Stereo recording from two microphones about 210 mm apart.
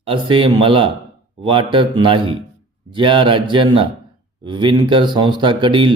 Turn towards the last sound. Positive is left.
turn(degrees=-25)  # may be behind; listen again after turning